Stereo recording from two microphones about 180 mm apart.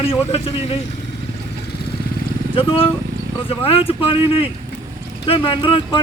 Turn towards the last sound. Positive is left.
turn(degrees=30)  # may be behind; listen again after turning